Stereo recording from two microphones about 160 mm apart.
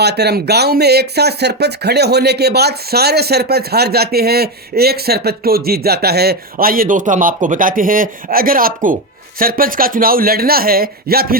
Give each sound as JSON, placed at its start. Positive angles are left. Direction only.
{"t": 0.0, "sound": "speech", "side_deg": -90}